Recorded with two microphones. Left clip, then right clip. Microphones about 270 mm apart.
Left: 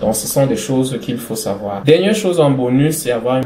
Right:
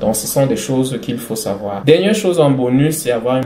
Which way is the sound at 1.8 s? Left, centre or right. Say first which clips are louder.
Even; right.